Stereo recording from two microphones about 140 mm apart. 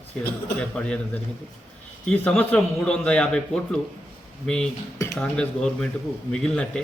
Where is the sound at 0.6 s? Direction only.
10° left (ahead or behind).